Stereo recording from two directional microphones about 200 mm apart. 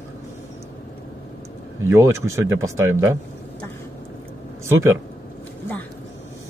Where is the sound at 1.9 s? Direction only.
15° right (ahead or behind).